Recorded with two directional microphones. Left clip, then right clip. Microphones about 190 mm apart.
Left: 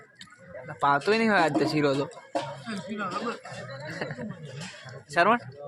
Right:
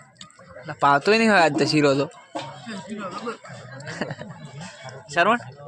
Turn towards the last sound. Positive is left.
turn(degrees=-10)  # may be behind; listen again after turning